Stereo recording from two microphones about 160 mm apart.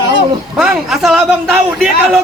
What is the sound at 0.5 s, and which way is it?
A man's voice, centre (ahead or behind).